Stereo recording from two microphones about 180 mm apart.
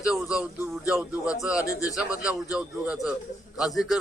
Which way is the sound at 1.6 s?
20° left (ahead or behind).